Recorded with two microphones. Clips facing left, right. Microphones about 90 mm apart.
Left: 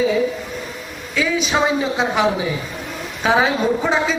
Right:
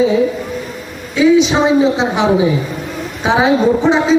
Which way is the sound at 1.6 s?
25° right (ahead or behind).